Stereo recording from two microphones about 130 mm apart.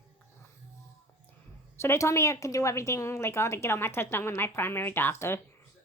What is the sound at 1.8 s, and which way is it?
A woman's voice, 20° left (ahead or behind).